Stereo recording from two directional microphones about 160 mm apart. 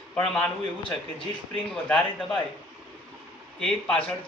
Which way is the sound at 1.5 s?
5° left (ahead or behind).